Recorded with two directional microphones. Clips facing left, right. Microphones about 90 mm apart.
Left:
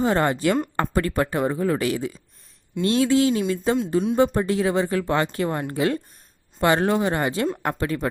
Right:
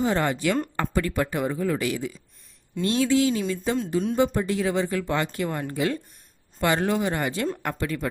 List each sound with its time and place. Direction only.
0.0 s speech: 40° left (ahead or behind)
0.8 s speech: 45° left (ahead or behind)